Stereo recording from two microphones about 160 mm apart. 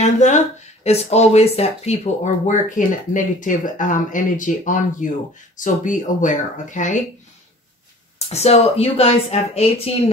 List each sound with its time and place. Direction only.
0.0 s a sound: 50° left (ahead or behind)
0.8 s speech: 40° left (ahead or behind)
2.4 s speech: 50° left (ahead or behind)
8.3 s speech: 40° left (ahead or behind)